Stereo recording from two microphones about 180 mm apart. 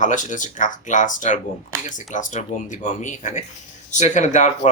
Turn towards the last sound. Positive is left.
turn(degrees=40)  # may be behind; listen again after turning